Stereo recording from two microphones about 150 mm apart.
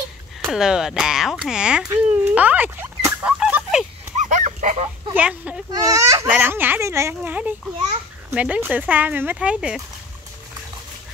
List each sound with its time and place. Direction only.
0.5 s speech: 5° right (ahead or behind)
1.9 s a sound: 15° right (ahead or behind)
4.2 s dog: 55° right (ahead or behind)
5.1 s speech: 10° right (ahead or behind)
5.7 s speech: 20° right (ahead or behind); by 9.8 s 5° right (ahead or behind)